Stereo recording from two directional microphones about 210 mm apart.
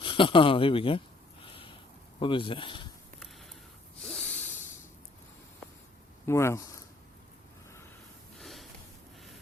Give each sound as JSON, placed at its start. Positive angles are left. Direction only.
{"t": 0.0, "sound": "snort", "side_deg": 25}
{"t": 2.1, "sound": "speech", "side_deg": 25}
{"t": 4.0, "sound": "snort", "side_deg": 5}
{"t": 6.2, "sound": "speech", "side_deg": 15}
{"t": 8.4, "sound": "a sound", "side_deg": 0}